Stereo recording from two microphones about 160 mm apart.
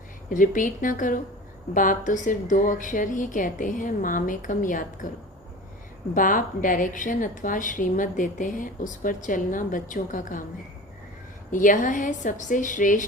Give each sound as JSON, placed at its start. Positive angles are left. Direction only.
{"t": 0.3, "sound": "a woman's voice", "side_deg": 55}
{"t": 6.1, "sound": "a woman's voice", "side_deg": 55}
{"t": 11.5, "sound": "a woman's voice", "side_deg": 55}